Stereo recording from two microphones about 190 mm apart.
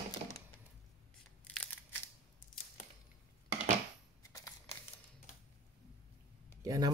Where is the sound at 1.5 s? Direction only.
10° left (ahead or behind).